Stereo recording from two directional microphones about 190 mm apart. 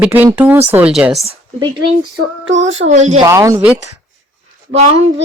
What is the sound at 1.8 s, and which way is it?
Child singing, 75° right (ahead or behind).